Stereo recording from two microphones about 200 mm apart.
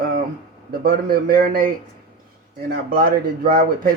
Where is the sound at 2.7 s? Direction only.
45° right (ahead or behind).